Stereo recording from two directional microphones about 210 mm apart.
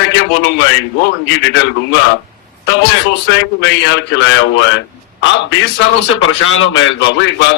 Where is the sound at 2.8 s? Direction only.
55° left (ahead or behind).